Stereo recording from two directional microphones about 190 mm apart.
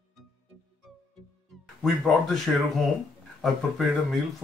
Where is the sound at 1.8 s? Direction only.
Centre (ahead or behind).